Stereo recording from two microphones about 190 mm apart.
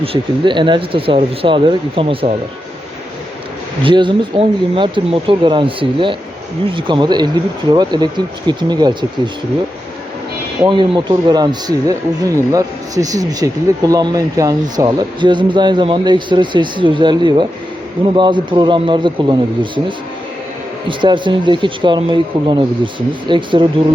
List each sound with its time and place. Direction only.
0.0 s speech: 25° right (ahead or behind)
3.8 s speech: 25° right (ahead or behind)
10.7 s speech: 25° right (ahead or behind)
20.8 s speech: 25° right (ahead or behind)